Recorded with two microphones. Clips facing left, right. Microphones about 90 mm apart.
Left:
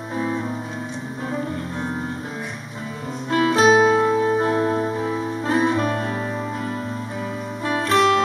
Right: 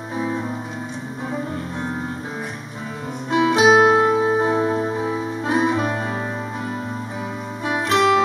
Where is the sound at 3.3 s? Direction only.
15° right (ahead or behind).